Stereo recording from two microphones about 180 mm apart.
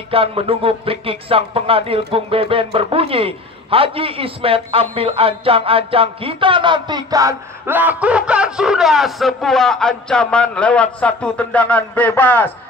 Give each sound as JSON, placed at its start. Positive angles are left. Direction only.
{"t": 0.1, "sound": "speech", "side_deg": -30}